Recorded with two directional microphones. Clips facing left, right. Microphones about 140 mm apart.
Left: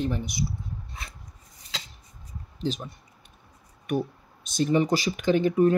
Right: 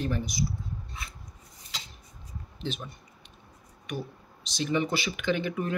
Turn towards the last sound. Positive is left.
turn(degrees=40)  # may be behind; listen again after turning